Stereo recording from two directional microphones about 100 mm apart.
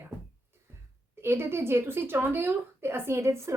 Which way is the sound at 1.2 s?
25° right (ahead or behind).